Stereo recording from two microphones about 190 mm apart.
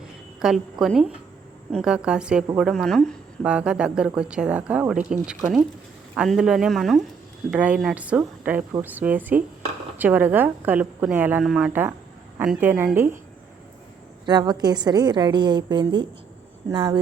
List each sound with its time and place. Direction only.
0.3 s a woman's voice: centre (ahead or behind)
14.3 s a woman's voice: 20° right (ahead or behind)